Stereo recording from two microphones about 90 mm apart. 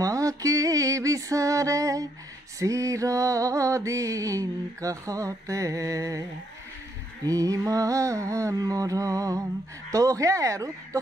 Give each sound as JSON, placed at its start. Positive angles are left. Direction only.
{"t": 0.0, "sound": "music", "side_deg": -40}
{"t": 2.6, "sound": "mantra", "side_deg": -35}
{"t": 7.2, "sound": "mantra", "side_deg": -40}